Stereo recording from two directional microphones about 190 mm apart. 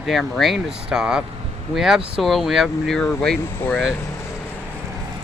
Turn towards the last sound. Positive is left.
turn(degrees=15)  # may be behind; listen again after turning